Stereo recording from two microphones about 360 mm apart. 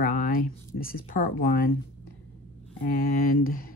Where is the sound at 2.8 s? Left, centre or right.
Left.